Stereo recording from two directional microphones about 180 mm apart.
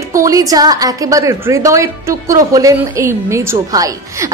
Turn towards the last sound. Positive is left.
turn(degrees=-20)  # may be behind; listen again after turning